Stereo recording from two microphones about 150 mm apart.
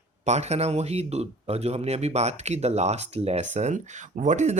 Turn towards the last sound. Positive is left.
turn(degrees=-55)  # may be behind; listen again after turning